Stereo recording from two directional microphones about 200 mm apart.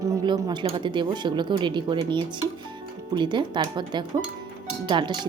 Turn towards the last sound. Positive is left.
turn(degrees=-25)  # may be behind; listen again after turning